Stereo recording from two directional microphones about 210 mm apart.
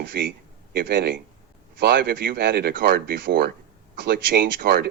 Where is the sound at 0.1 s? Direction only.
55° right (ahead or behind).